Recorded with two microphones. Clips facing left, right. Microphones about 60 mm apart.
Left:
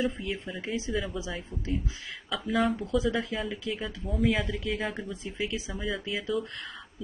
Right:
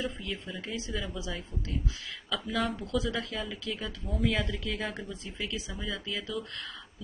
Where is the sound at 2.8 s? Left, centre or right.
Centre.